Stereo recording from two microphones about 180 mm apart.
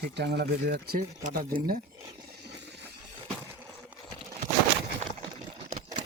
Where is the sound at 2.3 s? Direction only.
65° right (ahead or behind).